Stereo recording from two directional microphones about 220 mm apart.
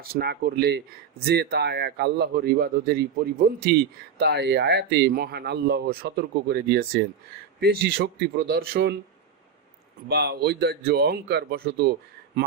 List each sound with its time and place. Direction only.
0.0 s speech: 45° right (ahead or behind)
10.1 s speech: 50° right (ahead or behind)